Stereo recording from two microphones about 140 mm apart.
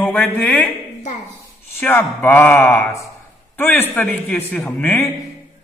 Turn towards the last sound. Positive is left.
turn(degrees=15)  # may be behind; listen again after turning